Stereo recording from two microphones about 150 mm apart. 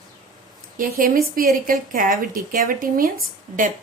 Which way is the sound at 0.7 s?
65° right (ahead or behind).